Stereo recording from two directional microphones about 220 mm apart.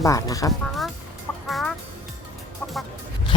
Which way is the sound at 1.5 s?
Centre (ahead or behind).